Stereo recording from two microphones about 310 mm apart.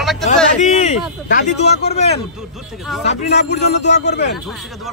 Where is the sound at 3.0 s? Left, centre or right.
Left.